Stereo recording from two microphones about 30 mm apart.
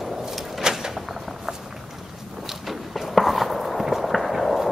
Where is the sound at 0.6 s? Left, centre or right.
Right.